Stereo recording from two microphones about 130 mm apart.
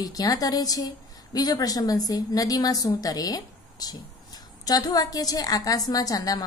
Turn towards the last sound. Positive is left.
turn(degrees=30)  # may be behind; listen again after turning